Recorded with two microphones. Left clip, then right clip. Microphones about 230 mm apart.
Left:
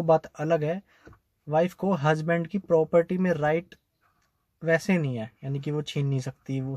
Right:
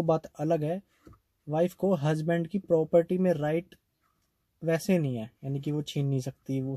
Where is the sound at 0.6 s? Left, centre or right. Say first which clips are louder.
Left 3 dB; left.